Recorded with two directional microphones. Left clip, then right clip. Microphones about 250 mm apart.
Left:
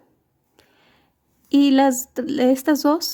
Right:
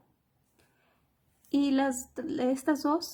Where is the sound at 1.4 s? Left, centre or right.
Left.